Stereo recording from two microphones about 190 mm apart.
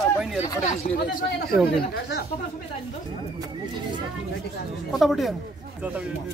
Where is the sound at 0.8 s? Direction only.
45° left (ahead or behind).